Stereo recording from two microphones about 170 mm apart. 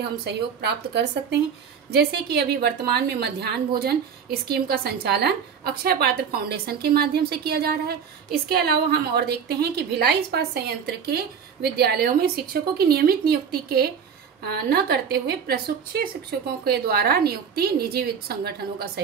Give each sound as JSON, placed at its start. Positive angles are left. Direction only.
{"t": 0.2, "sound": "a woman's voice", "side_deg": -75}